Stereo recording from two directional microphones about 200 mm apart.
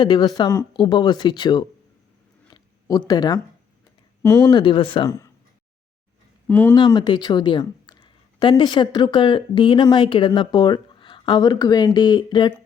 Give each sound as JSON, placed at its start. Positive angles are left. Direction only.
{"t": 0.0, "sound": "speech", "side_deg": 20}
{"t": 2.5, "sound": "a sound", "side_deg": 20}
{"t": 4.2, "sound": "speech", "side_deg": 15}
{"t": 4.6, "sound": "speech", "side_deg": 25}
{"t": 6.5, "sound": "speech", "side_deg": 10}
{"t": 6.7, "sound": "speech", "side_deg": 25}